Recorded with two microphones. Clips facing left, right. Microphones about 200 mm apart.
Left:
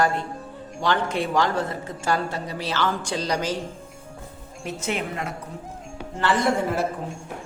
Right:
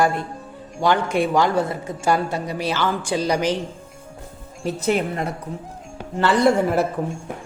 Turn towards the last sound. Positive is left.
turn(degrees=-65)  # may be behind; listen again after turning